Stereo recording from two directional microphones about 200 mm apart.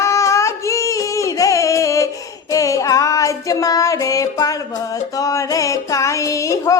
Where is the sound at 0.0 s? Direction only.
15° left (ahead or behind).